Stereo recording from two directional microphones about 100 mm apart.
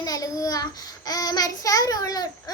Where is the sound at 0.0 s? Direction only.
35° left (ahead or behind).